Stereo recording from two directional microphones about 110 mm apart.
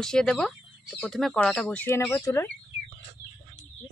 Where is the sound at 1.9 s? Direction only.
25° left (ahead or behind).